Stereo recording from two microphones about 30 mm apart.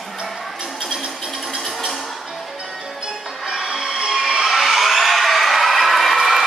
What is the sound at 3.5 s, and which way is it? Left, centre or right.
Music, centre.